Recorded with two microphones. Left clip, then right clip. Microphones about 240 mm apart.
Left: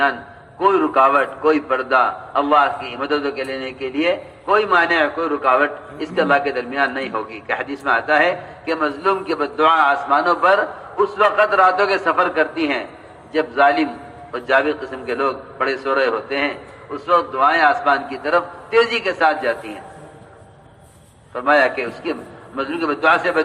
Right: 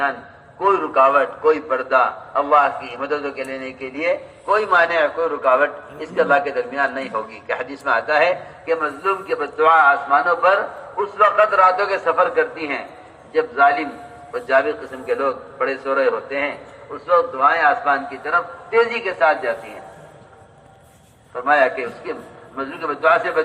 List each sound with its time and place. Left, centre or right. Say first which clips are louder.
0.6 s a man's voice: left 1 dB; left
21.3 s a man's voice: left 1 dB; left